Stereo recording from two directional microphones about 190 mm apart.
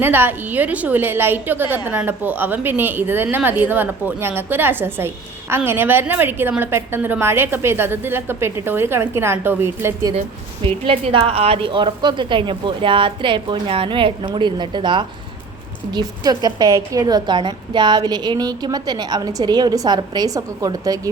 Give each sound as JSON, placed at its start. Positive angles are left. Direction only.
{"t": 0.0, "sound": "speech", "side_deg": -10}
{"t": 10.6, "sound": "a woman's voice", "side_deg": -30}